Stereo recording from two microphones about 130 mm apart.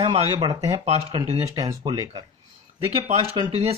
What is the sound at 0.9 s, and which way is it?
Speech, 50° right (ahead or behind).